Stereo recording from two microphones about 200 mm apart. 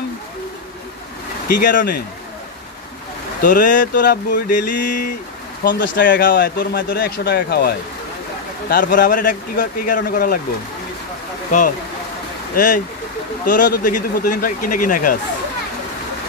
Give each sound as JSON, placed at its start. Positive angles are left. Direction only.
{"t": 1.6, "sound": "speech", "side_deg": 40}
{"t": 3.4, "sound": "speech", "side_deg": 40}
{"t": 5.6, "sound": "speech", "side_deg": 55}
{"t": 6.2, "sound": "speech", "side_deg": 45}
{"t": 12.5, "sound": "speech", "side_deg": 45}